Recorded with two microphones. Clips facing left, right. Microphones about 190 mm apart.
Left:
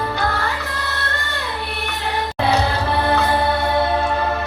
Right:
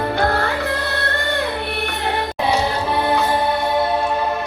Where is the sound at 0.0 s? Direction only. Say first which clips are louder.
Right 3 dB; 55° right (ahead or behind).